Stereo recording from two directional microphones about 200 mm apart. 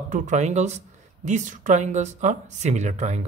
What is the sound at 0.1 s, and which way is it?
Speech, 35° right (ahead or behind).